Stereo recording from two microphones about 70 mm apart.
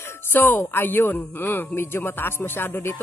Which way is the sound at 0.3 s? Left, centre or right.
Left.